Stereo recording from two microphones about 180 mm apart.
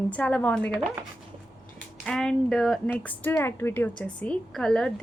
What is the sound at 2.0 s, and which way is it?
A woman's voice, 5° left (ahead or behind).